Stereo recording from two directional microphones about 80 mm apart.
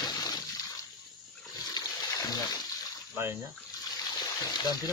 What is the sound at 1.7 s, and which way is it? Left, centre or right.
Water, left.